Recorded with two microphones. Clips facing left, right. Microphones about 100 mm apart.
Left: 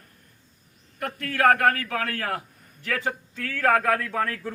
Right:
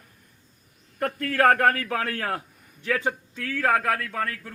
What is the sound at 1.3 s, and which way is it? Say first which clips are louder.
A man's voice: even; 35° right (ahead or behind).